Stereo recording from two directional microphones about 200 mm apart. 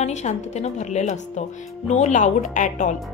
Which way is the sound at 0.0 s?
35° left (ahead or behind).